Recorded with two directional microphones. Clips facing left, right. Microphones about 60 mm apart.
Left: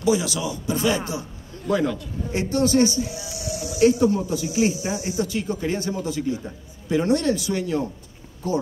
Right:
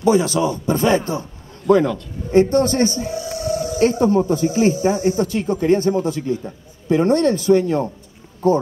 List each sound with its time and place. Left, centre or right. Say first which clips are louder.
0.0 s speech: right 6 dB; right
2.3 s speech: right 6 dB; right